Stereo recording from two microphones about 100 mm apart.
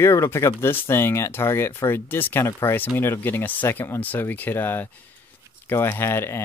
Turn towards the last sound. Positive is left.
turn(degrees=25)  # may be behind; listen again after turning